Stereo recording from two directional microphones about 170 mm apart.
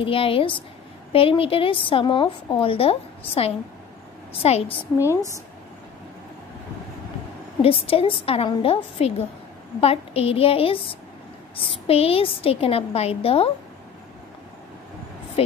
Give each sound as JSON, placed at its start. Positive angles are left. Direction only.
{"t": 0.0, "sound": "a woman's voice", "side_deg": 30}
{"t": 7.6, "sound": "a woman's voice", "side_deg": 35}
{"t": 15.4, "sound": "a woman's voice", "side_deg": 35}